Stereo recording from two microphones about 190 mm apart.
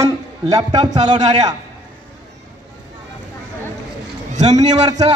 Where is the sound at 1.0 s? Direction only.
35° right (ahead or behind).